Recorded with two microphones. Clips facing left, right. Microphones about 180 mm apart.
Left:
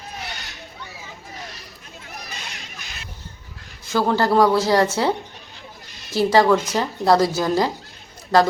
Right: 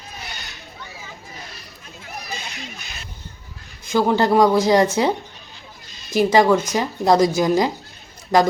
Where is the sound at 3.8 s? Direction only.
15° right (ahead or behind).